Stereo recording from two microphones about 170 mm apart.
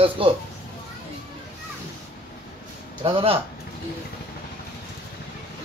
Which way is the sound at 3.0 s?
35° right (ahead or behind).